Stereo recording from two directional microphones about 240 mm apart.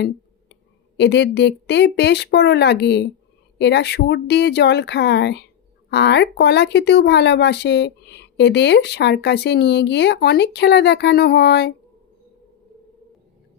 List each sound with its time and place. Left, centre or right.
0.0 s speech: left